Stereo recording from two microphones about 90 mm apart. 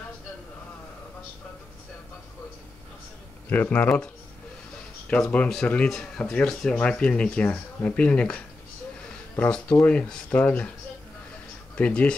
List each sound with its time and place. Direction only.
3.4 s speech: 20° left (ahead or behind)
5.3 s speech: 10° left (ahead or behind)
9.5 s speech: 15° left (ahead or behind)
11.7 s speech: 15° left (ahead or behind)